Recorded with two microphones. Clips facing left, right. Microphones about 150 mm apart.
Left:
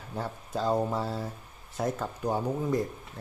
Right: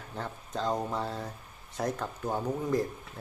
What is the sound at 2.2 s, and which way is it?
Speech, 15° left (ahead or behind).